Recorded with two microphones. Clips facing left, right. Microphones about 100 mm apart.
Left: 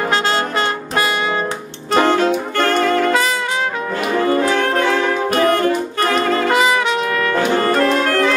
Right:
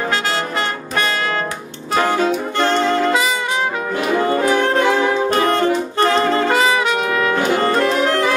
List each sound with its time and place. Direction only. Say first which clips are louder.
2.0 s saxophone: left 2 dB; 5° right (ahead or behind)
2.5 s saxophone: left 1 dB; 20° right (ahead or behind)
4.2 s music: left 1 dB; 20° right (ahead or behind)
5.3 s saxophone: left 1 dB; 25° right (ahead or behind)
7.1 s brass instrument: even; 10° right (ahead or behind)
7.6 s music: left 1 dB; 20° right (ahead or behind)